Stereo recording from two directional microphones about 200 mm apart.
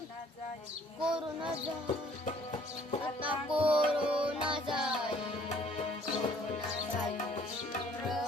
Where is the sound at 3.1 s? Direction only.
5° right (ahead or behind).